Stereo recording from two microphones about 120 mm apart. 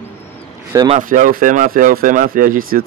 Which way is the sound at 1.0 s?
90° right.